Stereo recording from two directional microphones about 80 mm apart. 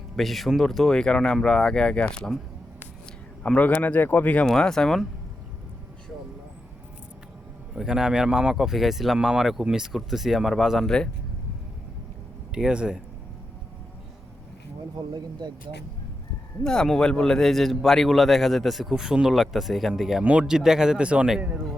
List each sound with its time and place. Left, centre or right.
0.2 s speech: centre
3.4 s speech: centre
4.4 s speech: centre
7.8 s a man's voice: centre
10.8 s speech: centre
12.5 s a man's voice: centre
15.1 s speech: right
16.6 s a man's voice: centre